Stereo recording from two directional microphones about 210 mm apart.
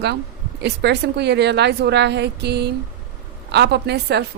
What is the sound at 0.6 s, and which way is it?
A woman's voice, 55° right (ahead or behind).